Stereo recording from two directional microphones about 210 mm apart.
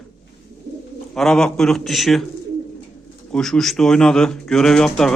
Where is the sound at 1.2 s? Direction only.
Centre (ahead or behind).